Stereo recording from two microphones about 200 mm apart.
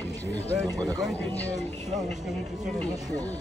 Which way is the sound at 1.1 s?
10° left (ahead or behind).